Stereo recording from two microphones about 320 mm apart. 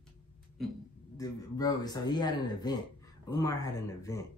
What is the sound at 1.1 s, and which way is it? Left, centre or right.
Speech, centre.